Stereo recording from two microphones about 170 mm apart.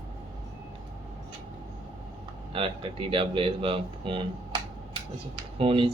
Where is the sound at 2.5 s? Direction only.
30° right (ahead or behind).